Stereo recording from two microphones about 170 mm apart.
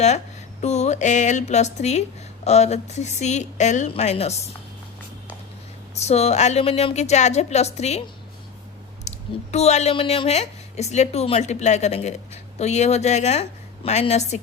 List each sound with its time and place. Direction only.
0.6 s a woman's voice: 40° left (ahead or behind)
5.9 s a woman's voice: 40° left (ahead or behind)
9.0 s a woman's voice: 40° left (ahead or behind)